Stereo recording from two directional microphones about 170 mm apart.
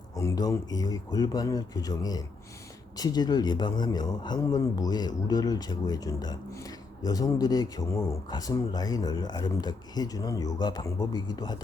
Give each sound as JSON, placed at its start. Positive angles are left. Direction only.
{"t": 0.2, "sound": "a man's voice", "side_deg": 20}